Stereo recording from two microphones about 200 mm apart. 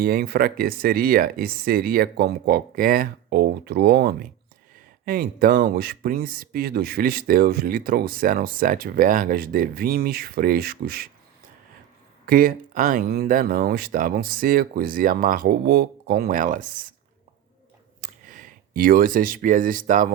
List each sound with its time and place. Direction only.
0.0 s speech: 50° right (ahead or behind)
12.2 s speech: 45° right (ahead or behind)
18.0 s speech: 40° right (ahead or behind)